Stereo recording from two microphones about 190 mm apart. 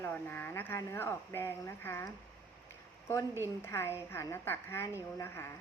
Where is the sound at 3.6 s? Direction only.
15° left (ahead or behind).